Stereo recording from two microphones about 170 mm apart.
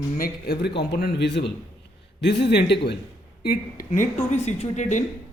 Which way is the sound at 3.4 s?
60° left (ahead or behind).